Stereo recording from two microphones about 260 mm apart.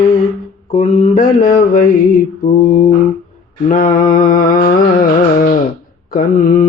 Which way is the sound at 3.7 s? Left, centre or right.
Left.